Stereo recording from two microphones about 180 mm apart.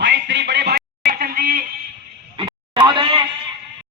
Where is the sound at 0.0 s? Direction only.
75° right (ahead or behind); by 1.6 s 50° right (ahead or behind).